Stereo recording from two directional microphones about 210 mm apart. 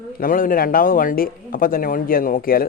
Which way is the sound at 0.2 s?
40° left (ahead or behind).